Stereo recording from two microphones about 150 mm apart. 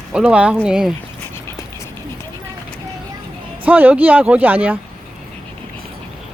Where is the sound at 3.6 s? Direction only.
10° right (ahead or behind).